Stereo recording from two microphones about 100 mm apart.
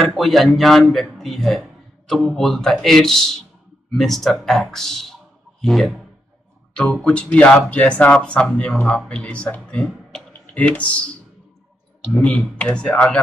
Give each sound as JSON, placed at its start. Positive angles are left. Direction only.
{"t": 0.0, "sound": "a man's voice", "side_deg": 0}
{"t": 12.1, "sound": "speech", "side_deg": 15}